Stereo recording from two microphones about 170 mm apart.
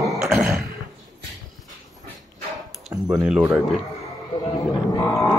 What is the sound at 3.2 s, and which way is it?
Speech, 5° right (ahead or behind).